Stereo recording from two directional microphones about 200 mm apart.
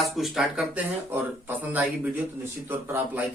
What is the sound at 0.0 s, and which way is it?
Speech, centre (ahead or behind).